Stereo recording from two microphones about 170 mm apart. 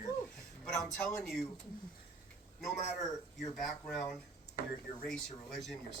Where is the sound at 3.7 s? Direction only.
5° left (ahead or behind).